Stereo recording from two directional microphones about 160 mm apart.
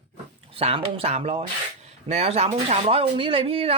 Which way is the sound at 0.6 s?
40° right (ahead or behind).